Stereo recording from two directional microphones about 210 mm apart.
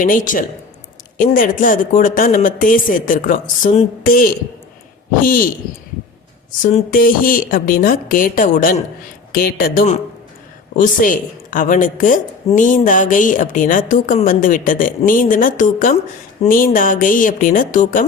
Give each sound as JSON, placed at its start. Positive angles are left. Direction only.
{"t": 0.0, "sound": "a woman's voice", "side_deg": 40}
{"t": 6.6, "sound": "a woman's voice", "side_deg": 35}